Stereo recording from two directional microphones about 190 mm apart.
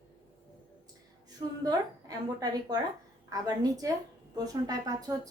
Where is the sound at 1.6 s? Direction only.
20° right (ahead or behind).